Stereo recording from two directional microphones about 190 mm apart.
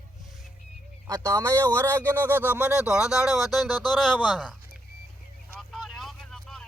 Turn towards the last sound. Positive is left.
turn(degrees=0)  # may be behind; listen again after turning